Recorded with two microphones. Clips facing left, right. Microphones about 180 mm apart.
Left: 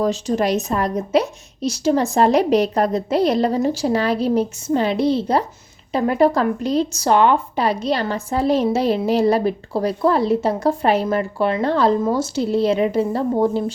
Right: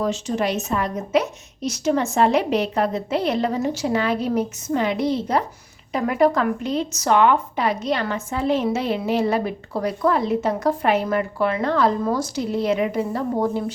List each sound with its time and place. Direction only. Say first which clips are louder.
0.0 s speech: left 3 dB; 35° left (ahead or behind)